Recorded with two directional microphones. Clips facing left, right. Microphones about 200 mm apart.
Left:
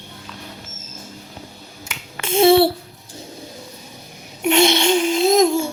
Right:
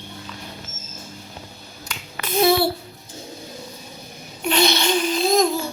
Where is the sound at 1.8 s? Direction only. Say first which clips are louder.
Left 3 dB; 25° left (ahead or behind).